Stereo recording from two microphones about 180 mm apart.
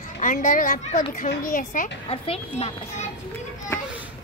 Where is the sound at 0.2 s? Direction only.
45° left (ahead or behind).